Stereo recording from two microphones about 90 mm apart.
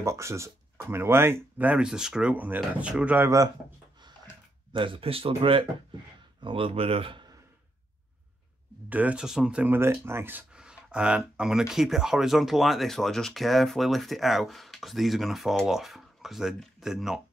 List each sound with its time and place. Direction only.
0.0 s speech: 30° right (ahead or behind); by 3.3 s 15° right (ahead or behind)
4.7 s speech: 75° right (ahead or behind)
8.8 s speech: 15° right (ahead or behind)
9.6 s speech: 25° right (ahead or behind)
10.5 s speech: 10° right (ahead or behind)